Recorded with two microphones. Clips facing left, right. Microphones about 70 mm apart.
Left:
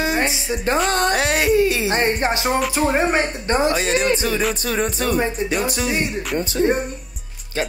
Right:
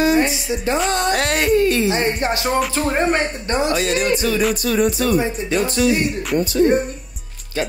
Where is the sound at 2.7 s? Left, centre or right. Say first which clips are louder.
Even; centre.